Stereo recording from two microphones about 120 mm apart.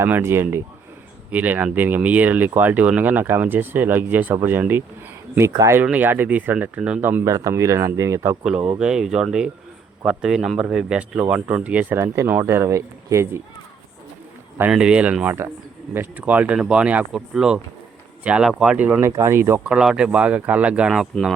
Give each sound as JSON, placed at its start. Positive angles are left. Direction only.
{"t": 0.0, "sound": "speech", "side_deg": -20}
{"t": 5.8, "sound": "speech", "side_deg": -15}
{"t": 7.3, "sound": "speech", "side_deg": -30}
{"t": 8.4, "sound": "speech", "side_deg": -10}
{"t": 14.7, "sound": "speech", "side_deg": -5}
{"t": 19.6, "sound": "speech", "side_deg": -5}